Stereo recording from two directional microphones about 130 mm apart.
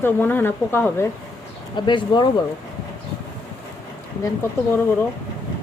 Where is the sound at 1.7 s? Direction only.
35° left (ahead or behind).